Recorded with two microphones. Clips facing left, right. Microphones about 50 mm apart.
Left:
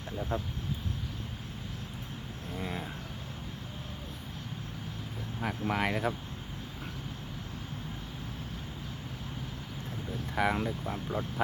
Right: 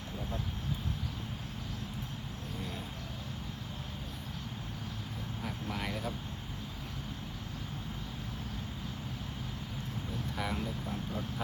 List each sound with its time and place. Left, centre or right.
5.4 s speech: left
10.3 s speech: left